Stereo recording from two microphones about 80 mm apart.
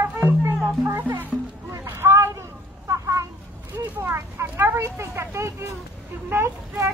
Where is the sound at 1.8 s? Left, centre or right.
Right.